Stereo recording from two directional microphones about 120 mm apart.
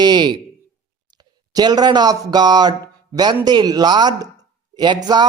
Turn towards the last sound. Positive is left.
turn(degrees=-35)  # may be behind; listen again after turning